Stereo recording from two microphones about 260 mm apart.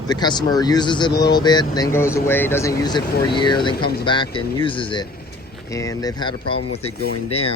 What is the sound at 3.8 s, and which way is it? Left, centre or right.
Speech, left.